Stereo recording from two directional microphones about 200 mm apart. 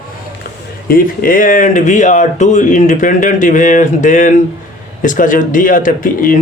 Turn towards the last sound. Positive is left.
turn(degrees=40)  # may be behind; listen again after turning